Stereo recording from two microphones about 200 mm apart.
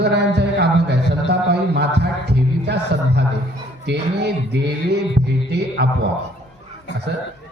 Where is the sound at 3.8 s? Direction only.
55° right (ahead or behind).